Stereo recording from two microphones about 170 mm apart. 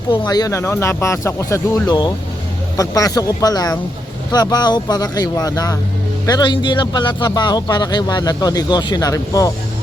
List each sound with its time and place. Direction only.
0.1 s a man's voice: 25° left (ahead or behind)